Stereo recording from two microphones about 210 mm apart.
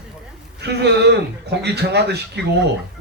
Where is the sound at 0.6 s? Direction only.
55° right (ahead or behind).